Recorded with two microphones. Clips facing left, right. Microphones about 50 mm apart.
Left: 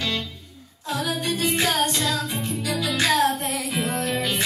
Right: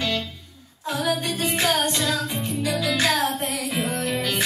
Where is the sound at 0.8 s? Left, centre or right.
Right.